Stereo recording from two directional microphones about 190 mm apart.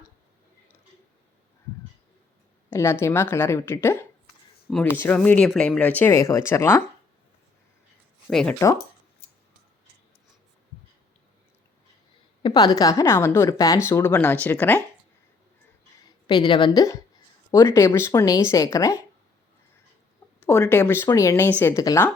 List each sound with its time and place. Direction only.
2.6 s speech: 15° left (ahead or behind)
8.3 s speech: 5° left (ahead or behind)
12.4 s speech: 25° left (ahead or behind)
16.0 s a woman's voice: 25° left (ahead or behind)
20.5 s speech: 15° left (ahead or behind)